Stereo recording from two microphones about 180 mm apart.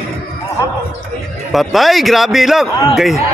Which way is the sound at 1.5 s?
Centre (ahead or behind).